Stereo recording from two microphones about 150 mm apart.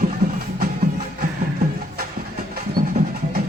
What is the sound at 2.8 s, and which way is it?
Music, 80° right.